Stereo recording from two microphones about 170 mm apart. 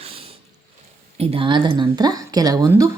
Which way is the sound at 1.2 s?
35° right (ahead or behind).